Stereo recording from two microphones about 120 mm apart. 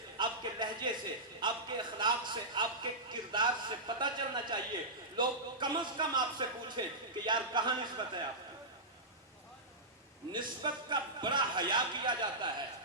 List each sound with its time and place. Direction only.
0.2 s a sound: 40° right (ahead or behind)
1.4 s a man's voice: 40° right (ahead or behind)
10.3 s a man's voice: 40° right (ahead or behind)